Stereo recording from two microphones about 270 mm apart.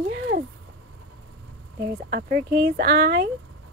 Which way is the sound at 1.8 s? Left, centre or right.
Right.